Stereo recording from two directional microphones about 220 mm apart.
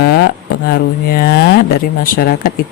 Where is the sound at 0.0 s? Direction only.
50° left (ahead or behind).